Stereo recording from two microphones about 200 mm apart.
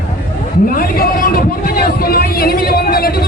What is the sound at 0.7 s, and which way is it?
Vehicle, 45° left (ahead or behind).